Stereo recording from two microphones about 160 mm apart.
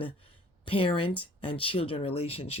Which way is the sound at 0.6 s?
35° left (ahead or behind).